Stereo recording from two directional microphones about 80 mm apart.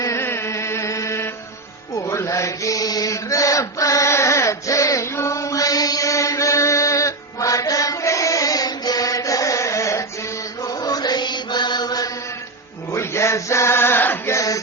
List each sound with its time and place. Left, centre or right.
0.0 s mantra: left
2.0 s chant: left
10.6 s mantra: left
12.9 s chant: left
14.3 s music: left